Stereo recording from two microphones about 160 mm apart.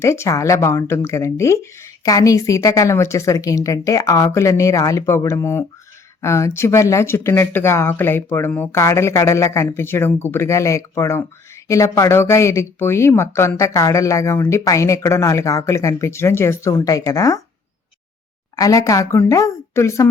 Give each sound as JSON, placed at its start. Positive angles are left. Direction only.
{"t": 0.0, "sound": "speech", "side_deg": 15}
{"t": 18.5, "sound": "speech", "side_deg": 20}